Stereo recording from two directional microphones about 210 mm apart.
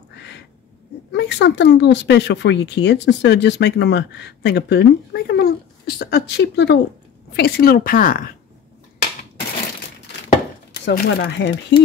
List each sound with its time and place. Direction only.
1.1 s a woman's voice: 55° left (ahead or behind)
10.7 s speech: 55° left (ahead or behind)